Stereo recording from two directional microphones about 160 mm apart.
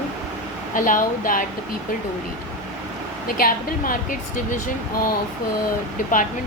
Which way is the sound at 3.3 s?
65° left (ahead or behind).